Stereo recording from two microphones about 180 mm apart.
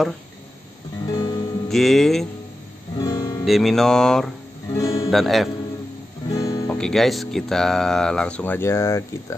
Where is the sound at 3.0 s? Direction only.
20° left (ahead or behind).